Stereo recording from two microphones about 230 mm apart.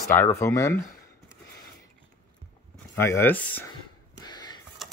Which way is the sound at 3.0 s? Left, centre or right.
Centre.